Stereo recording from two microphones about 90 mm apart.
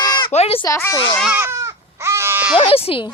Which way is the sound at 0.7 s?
40° left (ahead or behind).